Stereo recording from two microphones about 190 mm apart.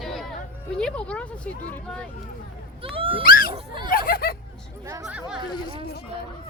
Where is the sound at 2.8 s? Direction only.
30° right (ahead or behind).